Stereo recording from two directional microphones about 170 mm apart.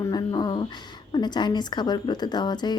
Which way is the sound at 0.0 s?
25° left (ahead or behind).